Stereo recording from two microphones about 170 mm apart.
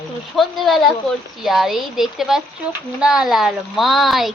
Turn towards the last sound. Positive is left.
turn(degrees=0)  # may be behind; listen again after turning